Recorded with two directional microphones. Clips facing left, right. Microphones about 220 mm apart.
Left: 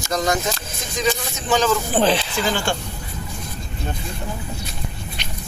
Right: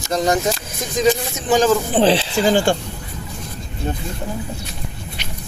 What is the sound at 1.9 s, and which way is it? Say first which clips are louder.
Speech: right 3 dB; 25° right (ahead or behind).